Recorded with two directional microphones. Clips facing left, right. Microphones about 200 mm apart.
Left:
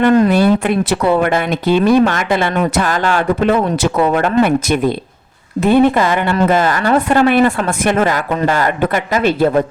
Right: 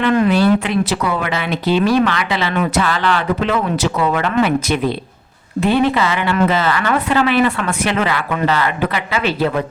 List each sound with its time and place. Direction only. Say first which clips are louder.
0.0 s speech: left 4 dB; 40° left (ahead or behind)
0.6 s a woman's voice: left 4 dB; 55° left (ahead or behind)